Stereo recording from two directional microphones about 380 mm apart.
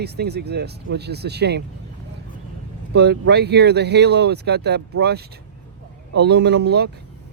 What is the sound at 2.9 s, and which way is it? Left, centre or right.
Speech, right.